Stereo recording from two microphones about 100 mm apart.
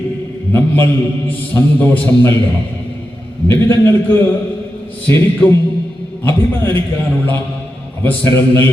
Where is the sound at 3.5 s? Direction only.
20° left (ahead or behind).